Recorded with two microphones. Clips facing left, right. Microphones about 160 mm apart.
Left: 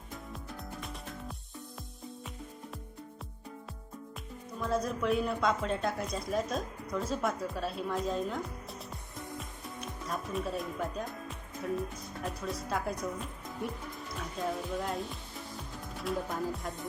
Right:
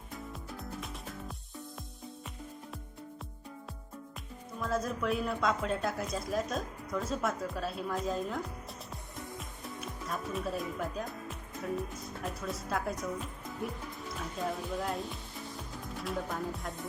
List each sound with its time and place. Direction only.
4.6 s speech: centre (ahead or behind)
9.4 s music: centre (ahead or behind)
12.2 s speech: centre (ahead or behind)
14.2 s music: centre (ahead or behind)
16.0 s speech: centre (ahead or behind)